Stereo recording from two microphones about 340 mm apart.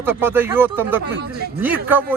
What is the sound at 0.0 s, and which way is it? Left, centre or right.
Speech, centre.